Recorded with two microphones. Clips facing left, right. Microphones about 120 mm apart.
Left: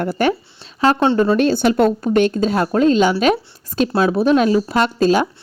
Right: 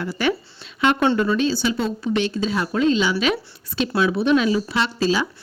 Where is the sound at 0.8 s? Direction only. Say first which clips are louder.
Left 4 dB; 35° left (ahead or behind).